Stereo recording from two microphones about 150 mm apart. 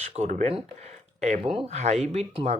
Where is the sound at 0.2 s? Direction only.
50° right (ahead or behind).